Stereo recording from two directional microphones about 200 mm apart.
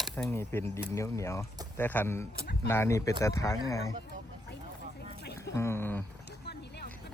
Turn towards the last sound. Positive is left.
turn(degrees=55)  # may be behind; listen again after turning